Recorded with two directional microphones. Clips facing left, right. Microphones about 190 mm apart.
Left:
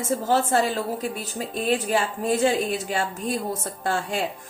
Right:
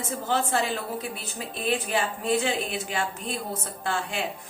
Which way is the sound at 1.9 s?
45° left (ahead or behind).